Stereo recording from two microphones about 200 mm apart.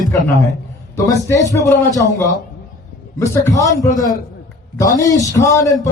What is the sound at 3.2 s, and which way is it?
A man's voice, 15° left (ahead or behind).